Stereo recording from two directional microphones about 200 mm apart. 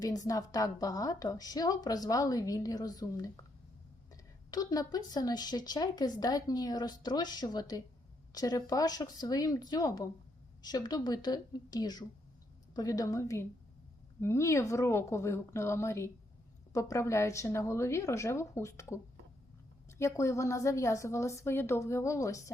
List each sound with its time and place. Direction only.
0.0 s a woman's voice: 15° left (ahead or behind)
20.0 s a woman's voice: 15° left (ahead or behind)